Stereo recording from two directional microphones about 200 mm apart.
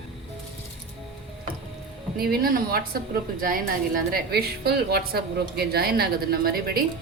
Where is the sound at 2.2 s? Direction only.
50° right (ahead or behind).